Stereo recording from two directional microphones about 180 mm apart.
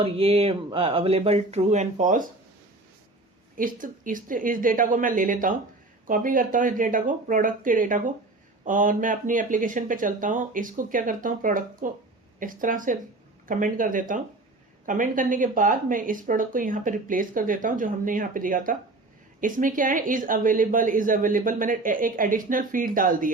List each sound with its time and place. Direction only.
0.0 s speech: 30° right (ahead or behind)
3.6 s speech: 50° right (ahead or behind)